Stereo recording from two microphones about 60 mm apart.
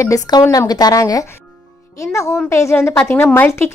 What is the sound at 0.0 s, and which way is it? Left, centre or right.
Speech, left.